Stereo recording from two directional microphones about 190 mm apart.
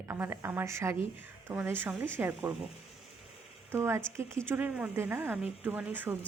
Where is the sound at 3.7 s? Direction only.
15° right (ahead or behind).